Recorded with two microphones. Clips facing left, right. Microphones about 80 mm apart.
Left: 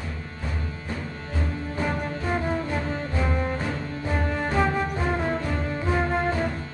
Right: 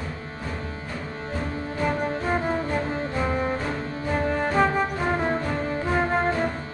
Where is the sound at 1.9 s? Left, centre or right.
Right.